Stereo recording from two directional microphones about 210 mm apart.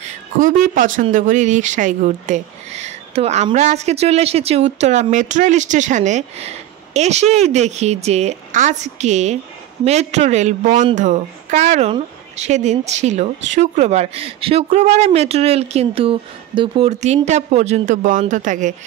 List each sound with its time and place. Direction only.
0.4 s speech: 40° right (ahead or behind)